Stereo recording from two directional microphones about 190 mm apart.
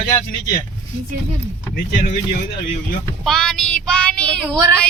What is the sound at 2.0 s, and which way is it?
Speech, 45° left (ahead or behind).